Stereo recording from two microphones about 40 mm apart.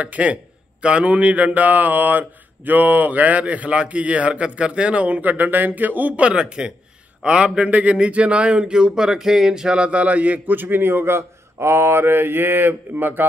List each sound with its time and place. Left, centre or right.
0.0 s speech: right
5.2 s speech: right
6.3 s speech: right
7.7 s speech: right
10.4 s a man's voice: right
11.7 s mantra: right